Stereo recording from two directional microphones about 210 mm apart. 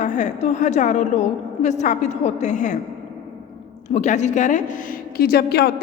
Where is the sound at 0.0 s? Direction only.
35° left (ahead or behind).